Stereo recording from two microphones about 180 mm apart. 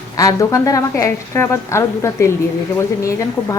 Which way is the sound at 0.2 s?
20° left (ahead or behind).